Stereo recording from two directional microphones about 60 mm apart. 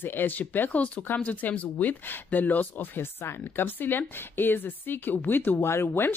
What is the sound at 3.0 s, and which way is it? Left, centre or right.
Speech, left.